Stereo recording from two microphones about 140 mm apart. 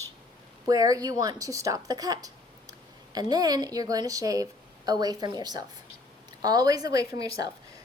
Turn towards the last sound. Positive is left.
turn(degrees=-25)  # may be behind; listen again after turning